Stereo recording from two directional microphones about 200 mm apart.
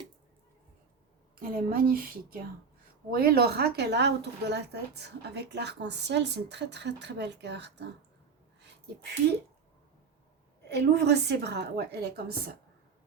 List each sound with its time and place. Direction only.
1.4 s a woman's voice: 45° right (ahead or behind)
10.7 s a woman's voice: 55° right (ahead or behind)